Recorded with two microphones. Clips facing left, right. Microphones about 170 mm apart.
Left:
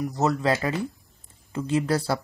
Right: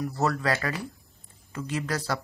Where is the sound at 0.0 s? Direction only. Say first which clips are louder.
Left 3 dB; 20° left (ahead or behind).